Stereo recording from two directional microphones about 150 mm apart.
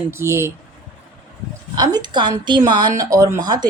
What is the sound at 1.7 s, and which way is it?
A woman's voice, 25° right (ahead or behind).